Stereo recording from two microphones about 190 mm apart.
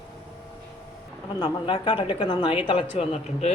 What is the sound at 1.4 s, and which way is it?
A woman's voice, 25° left (ahead or behind).